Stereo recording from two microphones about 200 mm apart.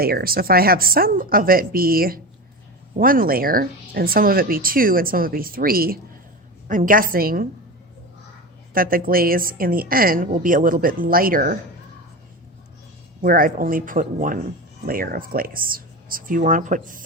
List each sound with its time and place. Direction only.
0.0 s speech: 50° right (ahead or behind)
8.7 s speech: 45° right (ahead or behind)
13.2 s speech: 45° right (ahead or behind)